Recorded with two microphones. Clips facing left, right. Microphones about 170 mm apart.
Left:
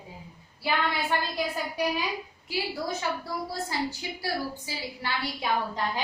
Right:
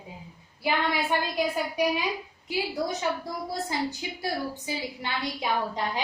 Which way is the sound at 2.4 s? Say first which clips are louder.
Right 3 dB; 20° right (ahead or behind).